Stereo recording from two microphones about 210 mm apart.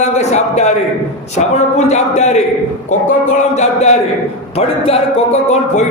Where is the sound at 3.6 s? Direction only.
30° left (ahead or behind).